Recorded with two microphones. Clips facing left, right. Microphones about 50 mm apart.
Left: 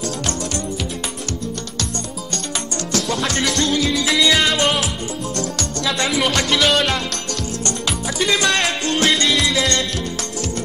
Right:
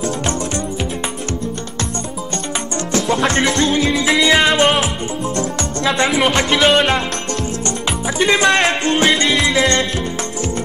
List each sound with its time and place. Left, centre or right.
2.9 s music: right
5.9 s speech: right
8.2 s music: right